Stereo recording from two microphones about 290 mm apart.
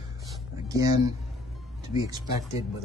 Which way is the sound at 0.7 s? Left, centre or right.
Centre.